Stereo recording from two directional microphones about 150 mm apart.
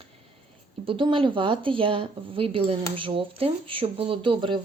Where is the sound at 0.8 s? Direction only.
35° right (ahead or behind).